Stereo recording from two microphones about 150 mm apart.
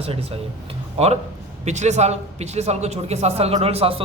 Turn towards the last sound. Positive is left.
turn(degrees=-40)  # may be behind; listen again after turning